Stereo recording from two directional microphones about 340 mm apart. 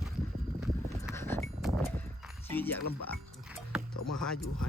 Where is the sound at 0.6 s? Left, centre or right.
Centre.